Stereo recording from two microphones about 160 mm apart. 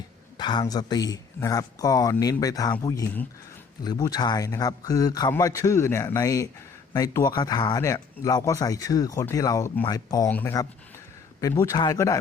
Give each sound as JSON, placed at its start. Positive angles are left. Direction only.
{"t": 0.3, "sound": "a man's voice", "side_deg": 25}
{"t": 10.2, "sound": "a man's voice", "side_deg": 10}